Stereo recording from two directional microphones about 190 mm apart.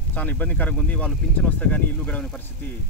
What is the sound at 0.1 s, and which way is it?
Speech, 10° left (ahead or behind).